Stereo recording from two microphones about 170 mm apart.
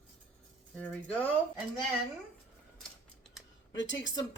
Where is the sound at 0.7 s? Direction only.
10° left (ahead or behind).